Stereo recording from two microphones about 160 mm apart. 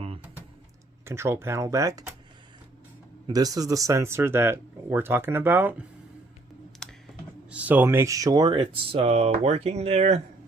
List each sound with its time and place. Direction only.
1.0 s speech: 15° right (ahead or behind)
3.2 s speech: 25° right (ahead or behind)
6.8 s typing: 5° left (ahead or behind)
7.5 s speech: 10° right (ahead or behind); by 10.2 s 40° right (ahead or behind)